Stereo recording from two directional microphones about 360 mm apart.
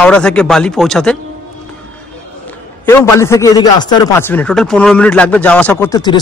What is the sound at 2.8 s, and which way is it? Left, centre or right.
A man's voice, centre.